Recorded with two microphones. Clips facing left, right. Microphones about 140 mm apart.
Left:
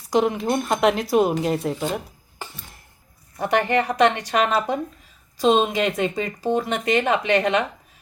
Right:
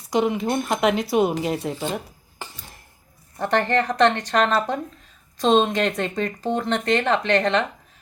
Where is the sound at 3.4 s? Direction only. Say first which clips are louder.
Left 1 dB; 10° left (ahead or behind).